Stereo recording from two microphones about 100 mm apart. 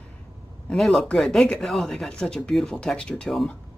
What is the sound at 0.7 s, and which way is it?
Speech, centre (ahead or behind).